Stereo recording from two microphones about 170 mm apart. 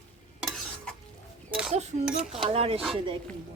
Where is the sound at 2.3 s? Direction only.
35° right (ahead or behind).